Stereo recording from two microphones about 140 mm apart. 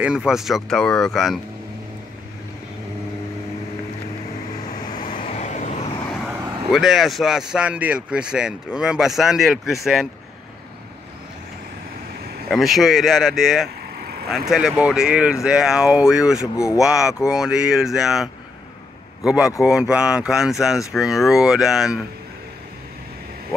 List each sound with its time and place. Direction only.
0.0 s speech: 5° right (ahead or behind)
5.2 s vehicle: 50° left (ahead or behind)
6.2 s speech: 5° right (ahead or behind)
12.4 s speech: centre (ahead or behind)